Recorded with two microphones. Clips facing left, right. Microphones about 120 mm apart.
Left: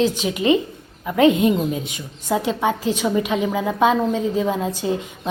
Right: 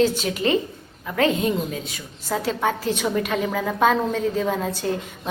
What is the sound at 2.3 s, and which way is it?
A woman's voice, 10° left (ahead or behind).